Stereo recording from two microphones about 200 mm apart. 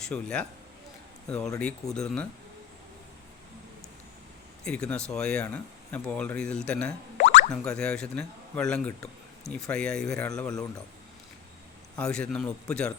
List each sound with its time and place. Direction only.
0.0 s speech: 5° left (ahead or behind)
1.5 s speech: 5° left (ahead or behind)
4.6 s speech: 5° left (ahead or behind)
7.2 s boing: 35° left (ahead or behind)
7.5 s speech: 5° left (ahead or behind)
11.9 s speech: 5° left (ahead or behind)